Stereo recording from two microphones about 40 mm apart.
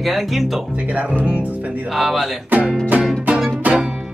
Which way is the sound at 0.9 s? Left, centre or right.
Right.